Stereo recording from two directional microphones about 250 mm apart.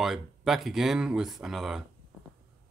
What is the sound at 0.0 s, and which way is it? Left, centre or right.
Speech, centre.